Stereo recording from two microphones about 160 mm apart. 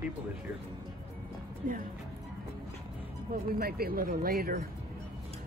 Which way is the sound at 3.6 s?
70° right (ahead or behind).